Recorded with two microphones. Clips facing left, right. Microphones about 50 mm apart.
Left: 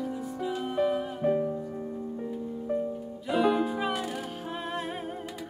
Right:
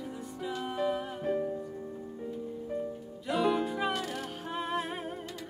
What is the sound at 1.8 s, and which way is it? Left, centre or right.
Music, centre.